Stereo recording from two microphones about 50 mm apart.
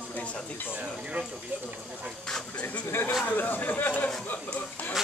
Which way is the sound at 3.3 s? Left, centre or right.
Left.